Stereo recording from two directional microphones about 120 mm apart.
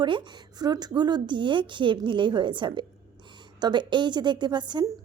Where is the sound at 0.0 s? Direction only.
40° right (ahead or behind).